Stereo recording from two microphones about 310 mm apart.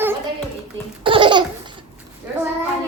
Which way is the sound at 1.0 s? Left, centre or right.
Centre.